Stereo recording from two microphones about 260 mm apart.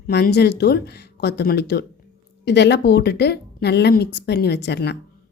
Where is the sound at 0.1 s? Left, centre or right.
Left.